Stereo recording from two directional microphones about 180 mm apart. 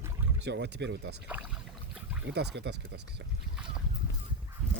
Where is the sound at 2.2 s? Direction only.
70° right (ahead or behind).